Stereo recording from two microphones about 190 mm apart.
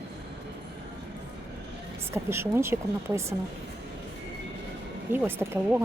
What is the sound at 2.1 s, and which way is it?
Speech, 15° right (ahead or behind).